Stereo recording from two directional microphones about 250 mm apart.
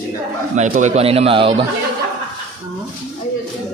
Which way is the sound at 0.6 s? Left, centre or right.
Right.